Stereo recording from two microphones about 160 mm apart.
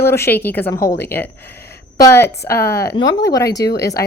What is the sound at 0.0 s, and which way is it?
Speech, 15° left (ahead or behind).